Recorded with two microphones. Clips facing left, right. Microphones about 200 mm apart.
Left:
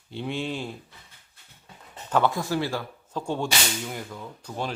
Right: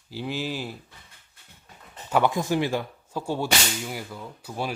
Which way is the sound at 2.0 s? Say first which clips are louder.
Right 1 dB; 10° right (ahead or behind).